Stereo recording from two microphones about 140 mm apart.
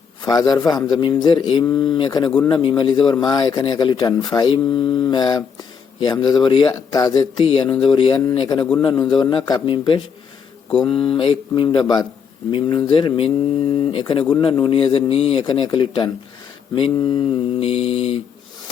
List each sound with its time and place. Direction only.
0.2 s a man's voice: 30° left (ahead or behind); by 18.2 s 45° left (ahead or behind)